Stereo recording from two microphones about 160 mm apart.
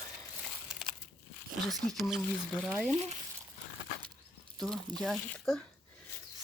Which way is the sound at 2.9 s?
40° right (ahead or behind).